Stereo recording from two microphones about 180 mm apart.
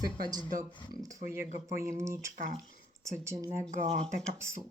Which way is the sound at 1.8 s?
15° right (ahead or behind).